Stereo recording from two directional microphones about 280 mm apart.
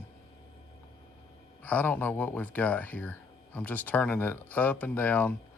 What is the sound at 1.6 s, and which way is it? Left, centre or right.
Speech, centre.